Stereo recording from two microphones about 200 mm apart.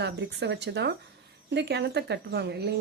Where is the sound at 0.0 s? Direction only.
55° right (ahead or behind).